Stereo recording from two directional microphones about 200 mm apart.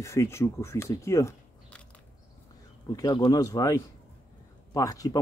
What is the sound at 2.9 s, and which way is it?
Speech, 20° left (ahead or behind).